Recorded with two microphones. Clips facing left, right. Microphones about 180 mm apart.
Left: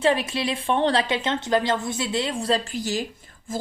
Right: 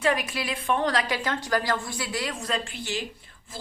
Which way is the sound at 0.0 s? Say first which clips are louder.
Left 4 dB; 30° left (ahead or behind).